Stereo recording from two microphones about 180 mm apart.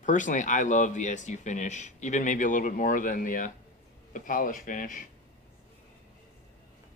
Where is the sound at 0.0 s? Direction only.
45° left (ahead or behind).